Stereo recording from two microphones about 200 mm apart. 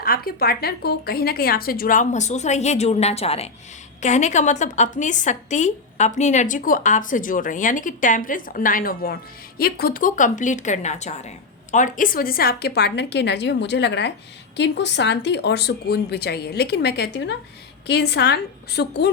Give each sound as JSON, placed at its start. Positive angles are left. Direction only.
{"t": 0.0, "sound": "a woman's voice", "side_deg": 50}